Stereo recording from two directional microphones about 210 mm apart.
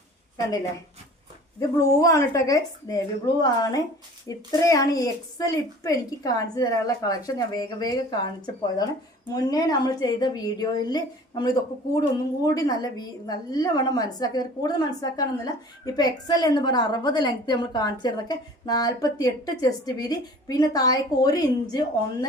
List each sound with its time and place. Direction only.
1.5 s a woman's voice: 15° left (ahead or behind)
9.3 s a woman's voice: 15° left (ahead or behind)